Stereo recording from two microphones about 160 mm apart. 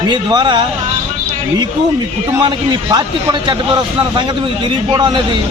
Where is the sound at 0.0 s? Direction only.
30° right (ahead or behind).